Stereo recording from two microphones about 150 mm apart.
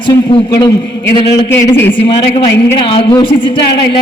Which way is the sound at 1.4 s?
20° left (ahead or behind).